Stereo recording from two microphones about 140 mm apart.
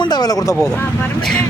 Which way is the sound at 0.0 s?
30° left (ahead or behind).